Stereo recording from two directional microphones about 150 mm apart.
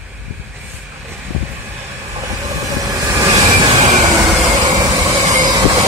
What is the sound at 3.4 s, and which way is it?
Train, 30° right (ahead or behind).